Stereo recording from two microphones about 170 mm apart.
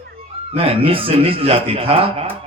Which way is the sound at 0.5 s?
35° right (ahead or behind).